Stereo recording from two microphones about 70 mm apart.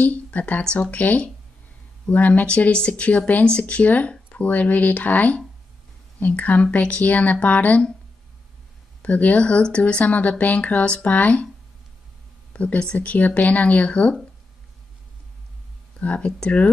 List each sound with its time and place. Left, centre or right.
0.0 s speech: left
9.0 s speech: centre
12.5 s speech: centre
16.0 s speech: centre